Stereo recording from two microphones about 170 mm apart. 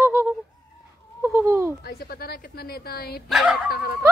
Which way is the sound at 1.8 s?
65° left (ahead or behind).